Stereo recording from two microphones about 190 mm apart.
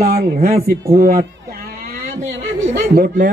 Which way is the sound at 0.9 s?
50° right (ahead or behind).